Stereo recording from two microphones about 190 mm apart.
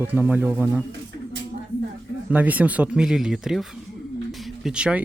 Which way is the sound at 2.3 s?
10° right (ahead or behind).